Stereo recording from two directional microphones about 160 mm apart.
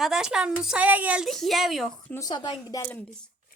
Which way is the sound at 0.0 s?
5° right (ahead or behind).